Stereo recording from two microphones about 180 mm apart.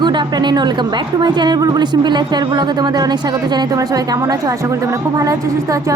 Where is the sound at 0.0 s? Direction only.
25° right (ahead or behind).